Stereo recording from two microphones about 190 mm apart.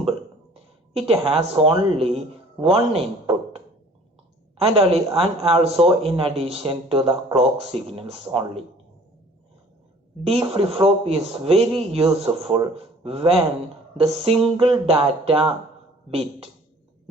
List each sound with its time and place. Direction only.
0.9 s speech: 30° right (ahead or behind)
10.2 s a man's voice: 30° right (ahead or behind)